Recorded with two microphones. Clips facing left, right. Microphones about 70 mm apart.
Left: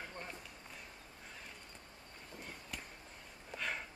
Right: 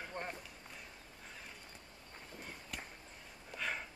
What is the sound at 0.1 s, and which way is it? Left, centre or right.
Run, right.